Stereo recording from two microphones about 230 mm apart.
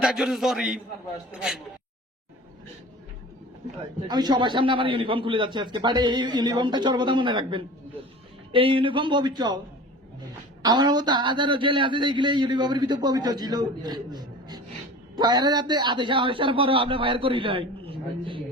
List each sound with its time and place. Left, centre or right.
0.0 s a man's voice: centre
4.1 s a man's voice: centre
10.6 s a man's voice: centre